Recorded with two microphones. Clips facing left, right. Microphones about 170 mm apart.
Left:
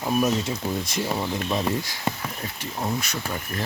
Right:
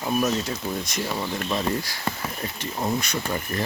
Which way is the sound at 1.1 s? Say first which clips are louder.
Even; 15° left (ahead or behind).